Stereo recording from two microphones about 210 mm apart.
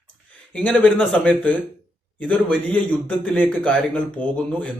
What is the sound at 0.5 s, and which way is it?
A man's voice, 5° left (ahead or behind).